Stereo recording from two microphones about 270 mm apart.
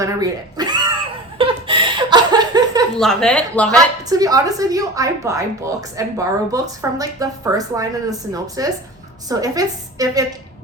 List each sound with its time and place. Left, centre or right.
0.0 s speech: centre
1.4 s laughter: centre
3.0 s speech: centre
3.8 s a woman's voice: centre